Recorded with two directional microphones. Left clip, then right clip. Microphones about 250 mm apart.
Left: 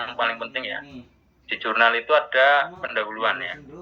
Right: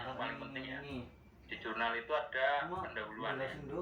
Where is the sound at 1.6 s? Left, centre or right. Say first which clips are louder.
Left 18 dB; left.